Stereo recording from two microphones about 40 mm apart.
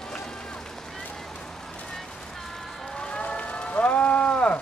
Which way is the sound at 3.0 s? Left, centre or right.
Left.